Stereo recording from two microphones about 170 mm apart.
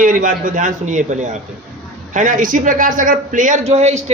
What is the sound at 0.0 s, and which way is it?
A man's voice, 50° right (ahead or behind).